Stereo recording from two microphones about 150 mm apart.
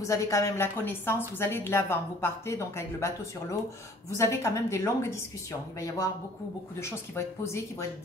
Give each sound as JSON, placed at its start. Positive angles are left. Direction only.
{"t": 0.0, "sound": "a woman's voice", "side_deg": 20}
{"t": 4.2, "sound": "a woman's voice", "side_deg": 20}